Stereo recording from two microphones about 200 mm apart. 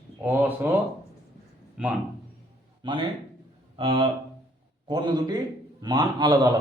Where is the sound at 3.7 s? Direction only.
25° right (ahead or behind).